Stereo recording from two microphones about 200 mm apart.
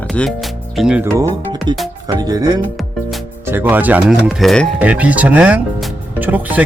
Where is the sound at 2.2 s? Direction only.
20° right (ahead or behind).